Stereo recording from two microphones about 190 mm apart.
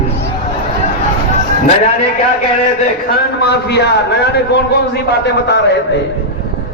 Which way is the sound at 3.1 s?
60° left (ahead or behind).